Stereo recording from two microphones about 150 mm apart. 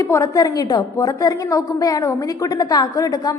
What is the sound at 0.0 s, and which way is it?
A woman's voice, 20° left (ahead or behind).